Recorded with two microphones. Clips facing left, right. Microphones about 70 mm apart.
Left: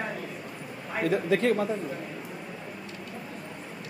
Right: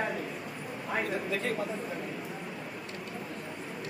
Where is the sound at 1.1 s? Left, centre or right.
Left.